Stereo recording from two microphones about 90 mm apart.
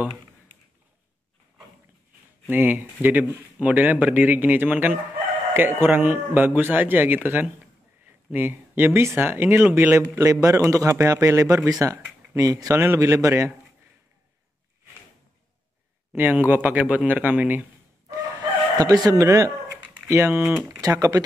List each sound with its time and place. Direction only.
2.5 s speech: 20° right (ahead or behind)
10.1 s speech: 35° right (ahead or behind)
12.8 s speech: 30° right (ahead or behind)
16.2 s speech: 20° right (ahead or behind)
18.8 s speech: 45° right (ahead or behind); by 20.4 s 25° right (ahead or behind)
20.8 s speech: 40° right (ahead or behind)